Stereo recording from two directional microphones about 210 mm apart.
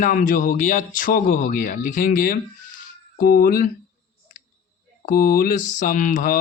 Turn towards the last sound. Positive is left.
turn(degrees=40)  # may be behind; listen again after turning